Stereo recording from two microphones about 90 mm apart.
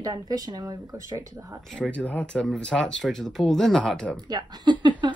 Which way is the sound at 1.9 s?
15° left (ahead or behind).